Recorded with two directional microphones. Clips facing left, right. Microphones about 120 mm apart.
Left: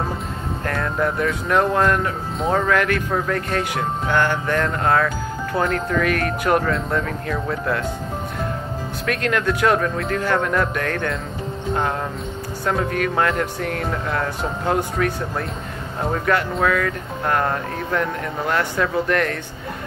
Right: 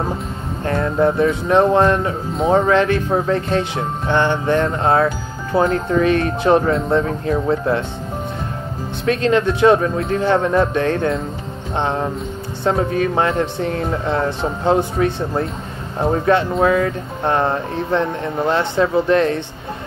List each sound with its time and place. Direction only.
0.7 s speech: 25° right (ahead or behind)
9.0 s speech: 25° right (ahead or behind)